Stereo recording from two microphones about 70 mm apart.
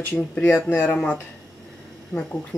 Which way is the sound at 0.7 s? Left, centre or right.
Left.